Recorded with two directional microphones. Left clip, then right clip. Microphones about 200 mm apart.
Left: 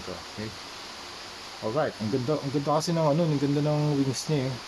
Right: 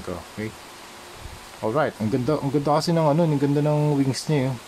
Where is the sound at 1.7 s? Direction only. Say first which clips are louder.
Right 4 dB; 30° right (ahead or behind).